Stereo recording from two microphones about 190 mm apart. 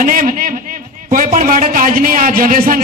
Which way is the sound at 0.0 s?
45° right (ahead or behind).